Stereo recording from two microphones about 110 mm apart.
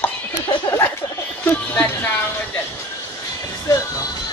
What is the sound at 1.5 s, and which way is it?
Speech, 15° left (ahead or behind).